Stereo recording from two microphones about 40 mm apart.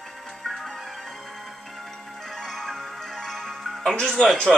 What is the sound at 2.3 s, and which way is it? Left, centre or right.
Music, centre.